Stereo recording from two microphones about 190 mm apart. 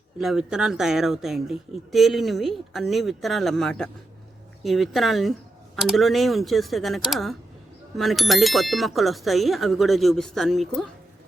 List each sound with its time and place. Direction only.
0.2 s speech: centre (ahead or behind)